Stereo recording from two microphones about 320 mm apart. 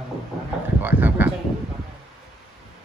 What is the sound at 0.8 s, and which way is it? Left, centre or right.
Speech, centre.